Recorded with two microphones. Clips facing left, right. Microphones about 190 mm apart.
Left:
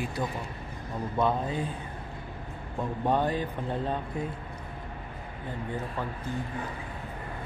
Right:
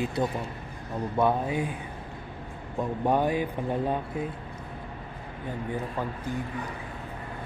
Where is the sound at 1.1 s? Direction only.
10° right (ahead or behind).